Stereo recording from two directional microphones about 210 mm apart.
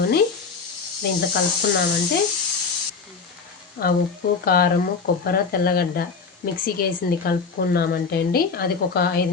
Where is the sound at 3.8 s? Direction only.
50° left (ahead or behind).